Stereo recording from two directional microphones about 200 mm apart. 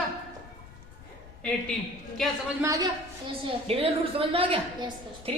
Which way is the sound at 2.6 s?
15° right (ahead or behind).